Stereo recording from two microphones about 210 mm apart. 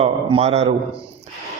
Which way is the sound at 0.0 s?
30° right (ahead or behind).